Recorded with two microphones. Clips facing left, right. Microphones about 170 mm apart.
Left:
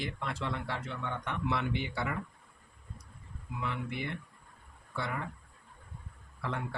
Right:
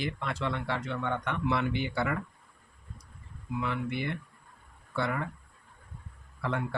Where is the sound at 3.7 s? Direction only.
70° right (ahead or behind).